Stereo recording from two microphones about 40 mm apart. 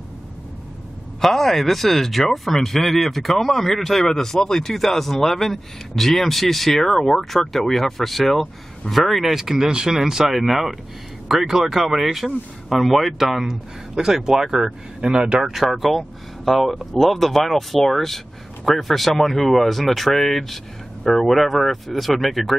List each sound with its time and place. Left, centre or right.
1.2 s speech: centre
9.7 s speech: centre
15.0 s speech: right
15.5 s speech: centre